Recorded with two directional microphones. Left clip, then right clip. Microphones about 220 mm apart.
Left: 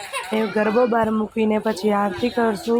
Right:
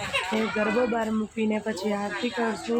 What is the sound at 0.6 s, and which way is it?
Speech, 25° left (ahead or behind).